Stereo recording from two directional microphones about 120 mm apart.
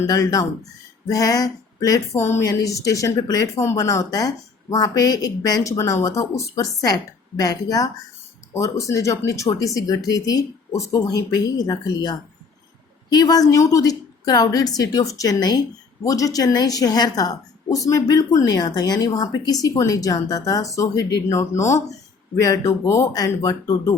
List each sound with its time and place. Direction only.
0.1 s a woman's voice: 30° left (ahead or behind)